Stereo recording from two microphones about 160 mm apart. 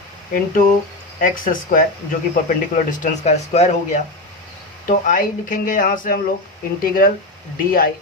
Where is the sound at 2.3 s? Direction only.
55° left (ahead or behind).